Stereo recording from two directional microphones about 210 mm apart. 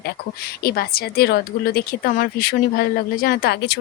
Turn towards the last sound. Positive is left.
turn(degrees=55)  # may be behind; listen again after turning